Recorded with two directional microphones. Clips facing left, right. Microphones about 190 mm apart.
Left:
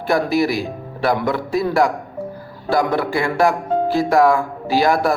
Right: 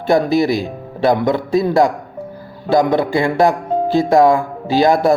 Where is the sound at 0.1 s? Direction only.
20° right (ahead or behind).